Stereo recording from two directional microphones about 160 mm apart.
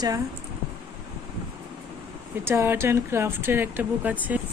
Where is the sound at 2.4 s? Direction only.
15° right (ahead or behind).